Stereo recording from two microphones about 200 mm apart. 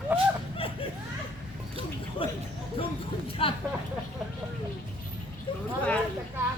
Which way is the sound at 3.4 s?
25° left (ahead or behind).